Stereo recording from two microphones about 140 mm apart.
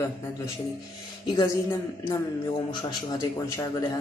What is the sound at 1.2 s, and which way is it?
A man's voice, 30° left (ahead or behind).